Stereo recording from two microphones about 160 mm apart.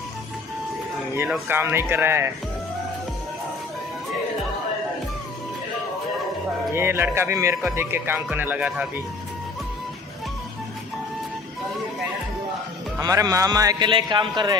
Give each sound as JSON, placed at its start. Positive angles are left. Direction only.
{"t": 1.5, "sound": "speech", "side_deg": -15}
{"t": 6.7, "sound": "speech", "side_deg": -15}
{"t": 13.0, "sound": "a man's voice", "side_deg": -20}